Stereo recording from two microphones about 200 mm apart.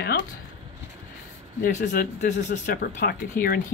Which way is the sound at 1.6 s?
40° left (ahead or behind).